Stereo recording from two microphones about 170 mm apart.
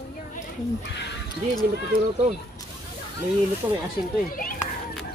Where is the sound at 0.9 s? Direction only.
90° left.